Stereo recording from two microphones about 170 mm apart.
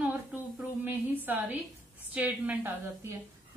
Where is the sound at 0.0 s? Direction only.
10° right (ahead or behind).